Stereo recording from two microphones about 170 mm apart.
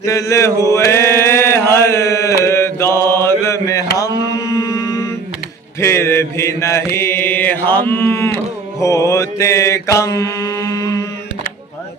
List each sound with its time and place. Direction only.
0.0 s chant: 20° left (ahead or behind)
3.3 s mantra: 15° left (ahead or behind)